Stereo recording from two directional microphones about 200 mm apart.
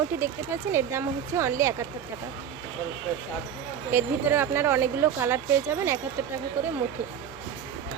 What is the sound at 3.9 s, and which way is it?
Speech, 10° right (ahead or behind).